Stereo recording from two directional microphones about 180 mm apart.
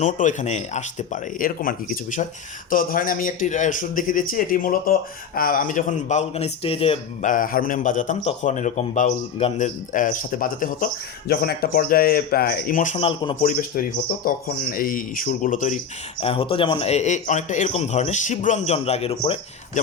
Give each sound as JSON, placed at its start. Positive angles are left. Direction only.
{"t": 0.0, "sound": "speech", "side_deg": 45}
{"t": 7.3, "sound": "speech", "side_deg": 50}
{"t": 13.0, "sound": "a man's voice", "side_deg": 30}
{"t": 13.4, "sound": "speech", "side_deg": 50}
{"t": 16.2, "sound": "a man's voice", "side_deg": 30}